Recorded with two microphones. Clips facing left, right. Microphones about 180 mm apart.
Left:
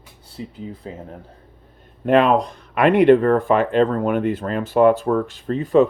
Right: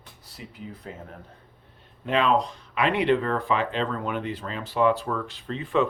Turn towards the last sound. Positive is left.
turn(degrees=40)  # may be behind; listen again after turning